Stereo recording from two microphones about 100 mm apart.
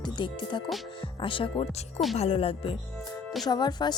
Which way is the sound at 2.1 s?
80° left.